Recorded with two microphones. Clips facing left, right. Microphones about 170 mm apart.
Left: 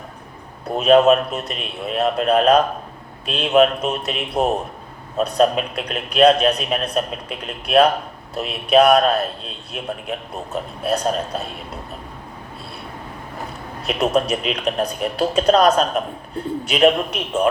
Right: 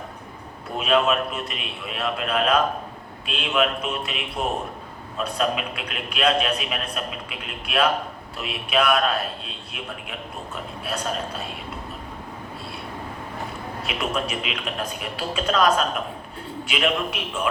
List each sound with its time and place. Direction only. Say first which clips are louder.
0.8 s a man's voice: left 8 dB; 40° left (ahead or behind)
13.8 s a man's voice: left 9 dB; 40° left (ahead or behind)